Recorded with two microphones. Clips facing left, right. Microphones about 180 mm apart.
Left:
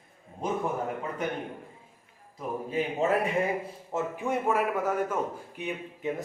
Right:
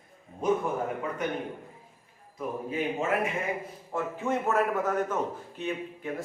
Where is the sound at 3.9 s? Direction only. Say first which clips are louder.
Even; 15° left (ahead or behind).